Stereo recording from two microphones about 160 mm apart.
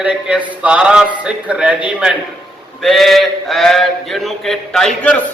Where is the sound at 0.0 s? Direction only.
5° right (ahead or behind).